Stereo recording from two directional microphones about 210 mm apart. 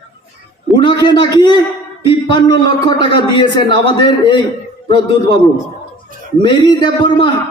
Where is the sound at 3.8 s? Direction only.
20° left (ahead or behind).